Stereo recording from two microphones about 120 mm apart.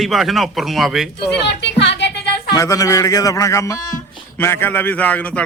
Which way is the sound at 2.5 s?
30° left (ahead or behind).